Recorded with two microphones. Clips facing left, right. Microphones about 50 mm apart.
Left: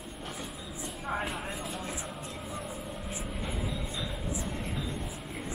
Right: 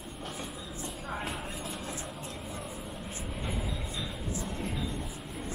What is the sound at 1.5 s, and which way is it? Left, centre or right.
Vehicle, centre.